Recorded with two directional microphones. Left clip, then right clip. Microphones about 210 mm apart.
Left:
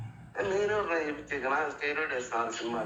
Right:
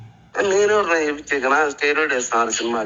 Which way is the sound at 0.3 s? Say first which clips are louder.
Right 12 dB; 30° right (ahead or behind).